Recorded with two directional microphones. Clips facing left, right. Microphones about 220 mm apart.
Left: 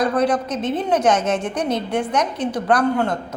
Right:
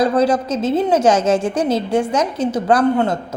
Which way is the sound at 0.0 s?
25° right (ahead or behind).